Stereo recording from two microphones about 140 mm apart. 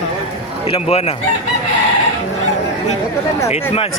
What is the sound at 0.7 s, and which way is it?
Fowl, 45° left (ahead or behind).